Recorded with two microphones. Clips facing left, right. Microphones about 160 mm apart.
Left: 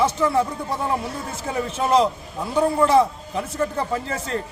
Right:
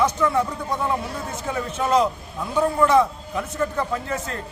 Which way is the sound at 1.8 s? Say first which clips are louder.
Left 1 dB; 25° left (ahead or behind).